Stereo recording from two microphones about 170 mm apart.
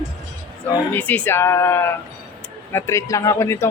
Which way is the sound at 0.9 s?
10° left (ahead or behind).